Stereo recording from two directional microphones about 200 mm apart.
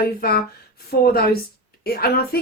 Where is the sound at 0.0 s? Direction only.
50° left (ahead or behind).